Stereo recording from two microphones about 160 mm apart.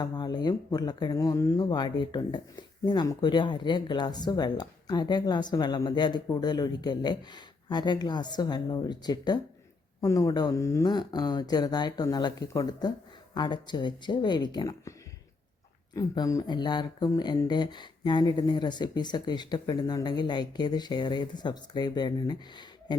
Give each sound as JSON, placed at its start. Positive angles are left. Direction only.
{"t": 0.0, "sound": "speech", "side_deg": 25}
{"t": 16.0, "sound": "speech", "side_deg": 20}